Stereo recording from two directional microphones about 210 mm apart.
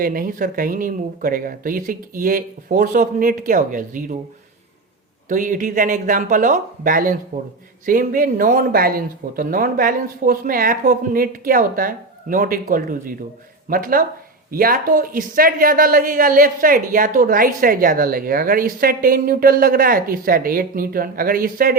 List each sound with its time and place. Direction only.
0.0 s speech: 40° right (ahead or behind)
5.3 s speech: 40° right (ahead or behind)